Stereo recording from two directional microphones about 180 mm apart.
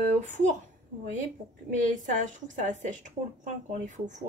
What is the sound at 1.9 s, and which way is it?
A woman's voice, 45° right (ahead or behind).